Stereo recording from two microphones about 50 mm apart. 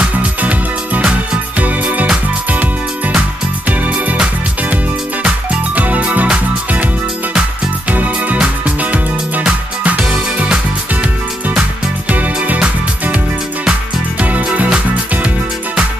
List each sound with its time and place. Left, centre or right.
0.0 s music: right
5.2 s music: right
7.9 s music: right